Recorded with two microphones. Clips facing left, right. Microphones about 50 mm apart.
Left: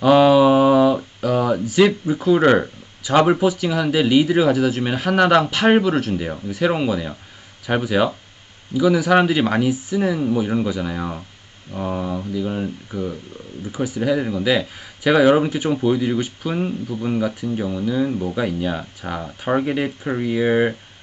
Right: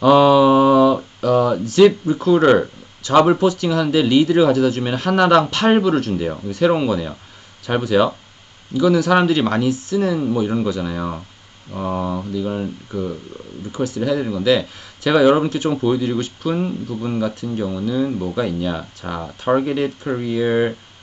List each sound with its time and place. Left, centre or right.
0.0 s a sound: centre
1.2 s speech: centre
11.7 s speech: centre
12.4 s speech: centre
12.9 s speech: centre
13.7 s speech: centre